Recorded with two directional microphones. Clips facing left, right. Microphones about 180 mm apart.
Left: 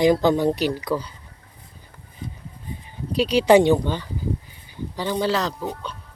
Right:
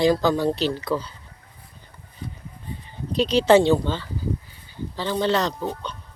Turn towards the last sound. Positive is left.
turn(degrees=5)  # may be behind; listen again after turning